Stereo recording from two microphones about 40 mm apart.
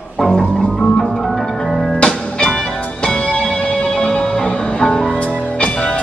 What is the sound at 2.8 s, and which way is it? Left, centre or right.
Music, left.